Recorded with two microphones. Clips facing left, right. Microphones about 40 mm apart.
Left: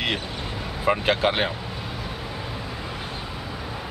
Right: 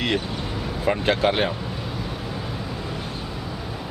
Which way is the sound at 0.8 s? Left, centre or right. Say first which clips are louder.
Even; centre.